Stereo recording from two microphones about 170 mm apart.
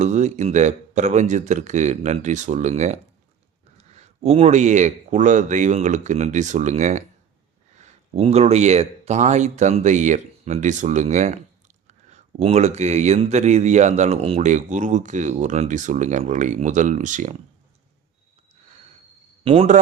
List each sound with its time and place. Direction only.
0.0 s speech: 40° right (ahead or behind)
19.5 s speech: 40° right (ahead or behind)